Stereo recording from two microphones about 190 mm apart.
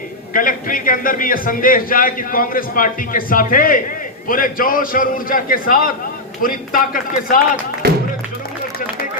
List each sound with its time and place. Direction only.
0.3 s a man's voice: 45° left (ahead or behind)
7.8 s music: 55° right (ahead or behind)